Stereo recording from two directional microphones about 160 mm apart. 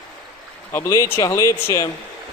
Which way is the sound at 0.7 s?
15° left (ahead or behind).